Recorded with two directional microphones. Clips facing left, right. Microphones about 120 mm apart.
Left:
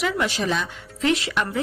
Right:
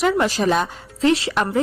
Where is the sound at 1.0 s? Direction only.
30° right (ahead or behind).